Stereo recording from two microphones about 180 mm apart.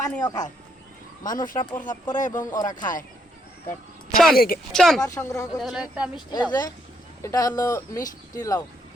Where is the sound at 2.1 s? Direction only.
45° left (ahead or behind).